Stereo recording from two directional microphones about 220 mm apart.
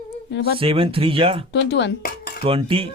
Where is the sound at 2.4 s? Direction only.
25° right (ahead or behind).